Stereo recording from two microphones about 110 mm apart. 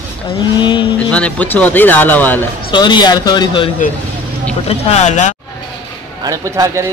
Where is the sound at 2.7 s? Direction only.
40° left (ahead or behind).